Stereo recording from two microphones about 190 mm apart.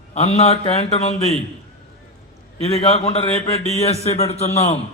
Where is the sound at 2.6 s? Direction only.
30° left (ahead or behind).